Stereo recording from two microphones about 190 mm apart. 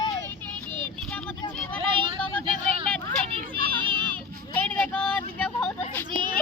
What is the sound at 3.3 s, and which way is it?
Children playing, 25° right (ahead or behind).